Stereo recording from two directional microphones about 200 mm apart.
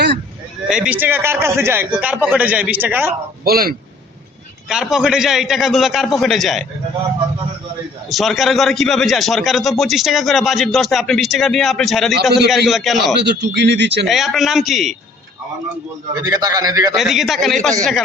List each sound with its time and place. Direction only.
0.7 s a man's voice: 5° right (ahead or behind)
3.4 s a man's voice: 50° right (ahead or behind)
4.7 s a man's voice: 5° right (ahead or behind)
8.1 s a man's voice: centre (ahead or behind)
13.4 s speech: 60° right (ahead or behind)
14.1 s a man's voice: centre (ahead or behind)
16.2 s a man's voice: 20° right (ahead or behind)
16.9 s a man's voice: centre (ahead or behind)